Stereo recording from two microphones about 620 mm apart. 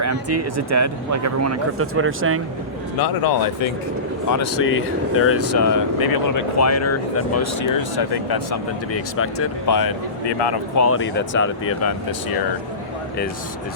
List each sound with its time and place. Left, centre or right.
0.0 s speech: right
3.0 s speech: left
4.3 s speech: left
7.9 s speech: left
8.9 s speech: left
10.8 s speech: left